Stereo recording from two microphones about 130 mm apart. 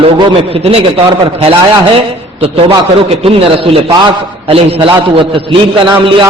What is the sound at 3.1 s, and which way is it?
A man's voice, 45° right (ahead or behind).